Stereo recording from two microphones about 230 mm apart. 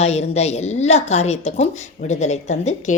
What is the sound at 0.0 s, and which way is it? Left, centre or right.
A woman's voice, left.